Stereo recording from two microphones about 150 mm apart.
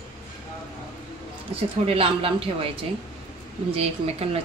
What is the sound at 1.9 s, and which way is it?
Speech, 40° right (ahead or behind).